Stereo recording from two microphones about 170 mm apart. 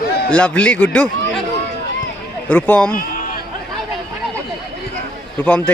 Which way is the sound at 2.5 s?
10° left (ahead or behind).